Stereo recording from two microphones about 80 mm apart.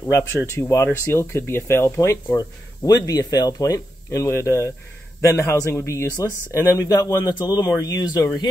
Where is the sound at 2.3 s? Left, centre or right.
Left.